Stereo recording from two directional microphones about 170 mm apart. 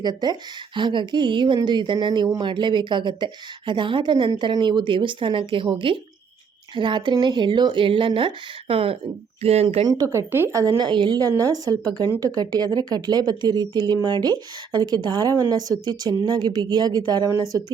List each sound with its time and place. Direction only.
0.0 s speech: 25° right (ahead or behind)
9.8 s speech: 20° right (ahead or behind)